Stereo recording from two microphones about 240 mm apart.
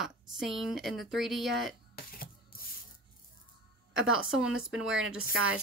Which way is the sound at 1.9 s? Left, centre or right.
Left.